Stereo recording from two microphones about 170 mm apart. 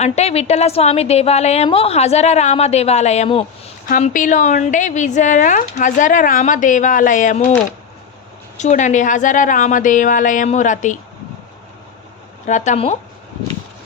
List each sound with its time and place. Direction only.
0.0 s a woman's voice: 40° left (ahead or behind)
3.8 s a woman's voice: 50° left (ahead or behind)
8.5 s a woman's voice: 45° left (ahead or behind)
12.5 s a woman's voice: 45° left (ahead or behind)